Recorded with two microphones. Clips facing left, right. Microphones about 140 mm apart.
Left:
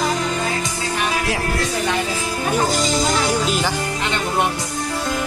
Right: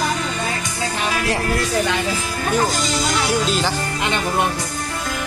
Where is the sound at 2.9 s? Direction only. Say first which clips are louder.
Left 1 dB; 15° left (ahead or behind).